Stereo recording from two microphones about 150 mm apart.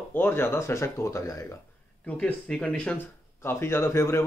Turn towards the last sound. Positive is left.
turn(degrees=15)  # may be behind; listen again after turning